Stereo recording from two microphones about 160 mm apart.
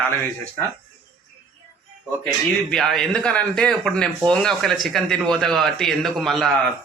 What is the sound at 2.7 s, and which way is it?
Speech, centre (ahead or behind).